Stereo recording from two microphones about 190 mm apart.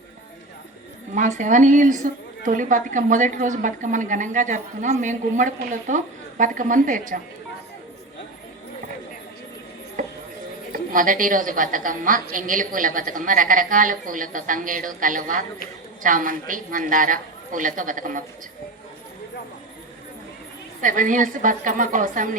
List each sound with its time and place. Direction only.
1.1 s a woman's voice: 40° right (ahead or behind)
10.0 s a sound: 45° right (ahead or behind)
10.7 s a woman's voice: 45° right (ahead or behind)
20.8 s a woman's voice: 45° right (ahead or behind)